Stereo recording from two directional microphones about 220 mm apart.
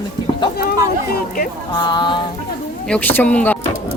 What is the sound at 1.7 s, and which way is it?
Speech, 20° left (ahead or behind).